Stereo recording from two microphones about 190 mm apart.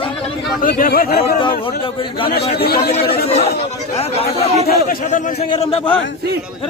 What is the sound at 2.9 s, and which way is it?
A man's voice, 35° left (ahead or behind).